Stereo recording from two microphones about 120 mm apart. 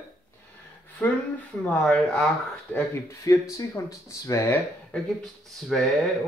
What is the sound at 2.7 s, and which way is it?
Speech, 25° left (ahead or behind).